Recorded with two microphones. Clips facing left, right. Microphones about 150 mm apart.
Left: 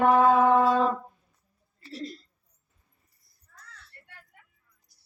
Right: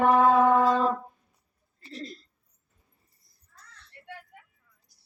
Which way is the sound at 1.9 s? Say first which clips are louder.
Left 2 dB; 5° left (ahead or behind).